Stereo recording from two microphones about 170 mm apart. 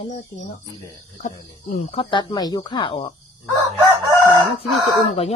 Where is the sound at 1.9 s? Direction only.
30° left (ahead or behind).